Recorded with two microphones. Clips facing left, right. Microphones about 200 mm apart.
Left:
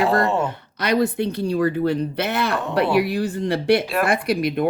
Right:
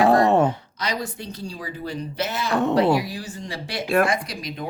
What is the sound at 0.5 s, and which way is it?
Speech, 60° left (ahead or behind).